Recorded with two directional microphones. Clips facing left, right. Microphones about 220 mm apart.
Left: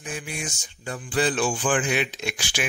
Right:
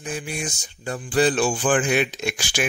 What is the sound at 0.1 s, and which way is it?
Music, 35° right (ahead or behind).